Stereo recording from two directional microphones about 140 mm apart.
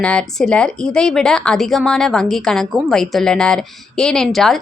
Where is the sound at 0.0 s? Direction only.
5° left (ahead or behind).